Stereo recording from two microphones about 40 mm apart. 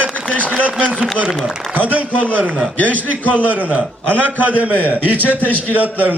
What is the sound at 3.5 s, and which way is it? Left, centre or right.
A man's voice, right.